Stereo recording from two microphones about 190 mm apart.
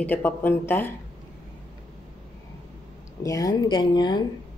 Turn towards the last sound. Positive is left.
turn(degrees=20)  # may be behind; listen again after turning